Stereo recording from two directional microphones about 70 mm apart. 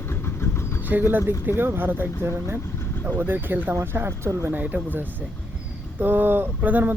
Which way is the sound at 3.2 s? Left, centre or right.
Right.